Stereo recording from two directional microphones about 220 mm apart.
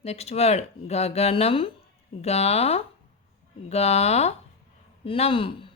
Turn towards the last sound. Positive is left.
turn(degrees=25)  # may be behind; listen again after turning